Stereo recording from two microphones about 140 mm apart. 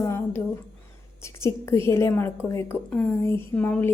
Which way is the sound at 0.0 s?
20° left (ahead or behind).